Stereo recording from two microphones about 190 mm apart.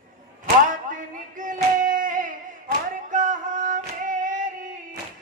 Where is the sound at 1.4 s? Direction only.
45° right (ahead or behind).